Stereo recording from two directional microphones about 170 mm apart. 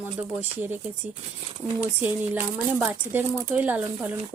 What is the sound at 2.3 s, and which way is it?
Speech, 10° right (ahead or behind).